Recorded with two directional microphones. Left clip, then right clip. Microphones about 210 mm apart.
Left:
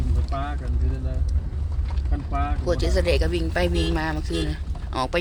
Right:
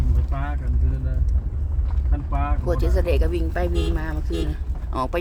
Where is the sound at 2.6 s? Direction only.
5° right (ahead or behind).